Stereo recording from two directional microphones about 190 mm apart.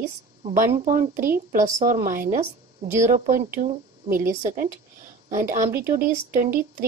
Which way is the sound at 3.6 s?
50° right (ahead or behind).